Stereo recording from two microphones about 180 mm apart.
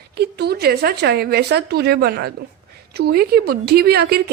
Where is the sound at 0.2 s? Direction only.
65° right (ahead or behind).